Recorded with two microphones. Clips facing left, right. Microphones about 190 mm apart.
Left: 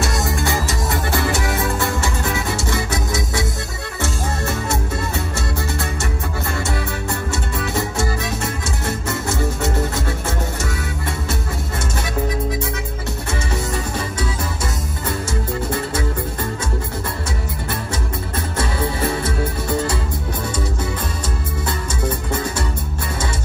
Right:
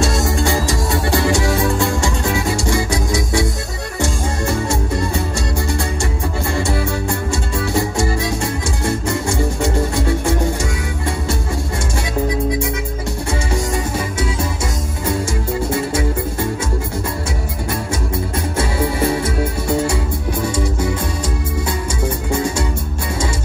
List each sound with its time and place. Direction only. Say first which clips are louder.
0.5 s music: right 3 dB; 20° left (ahead or behind)
1.1 s music: right 6 dB; 15° right (ahead or behind)
7.6 s music: right 4 dB; 15° right (ahead or behind)
22.0 s music: right 3 dB; 10° right (ahead or behind)